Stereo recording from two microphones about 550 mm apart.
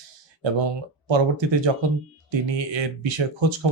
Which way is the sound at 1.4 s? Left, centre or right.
Right.